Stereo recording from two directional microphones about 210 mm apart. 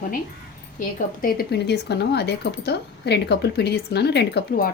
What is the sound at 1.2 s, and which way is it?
Speech, 50° left (ahead or behind).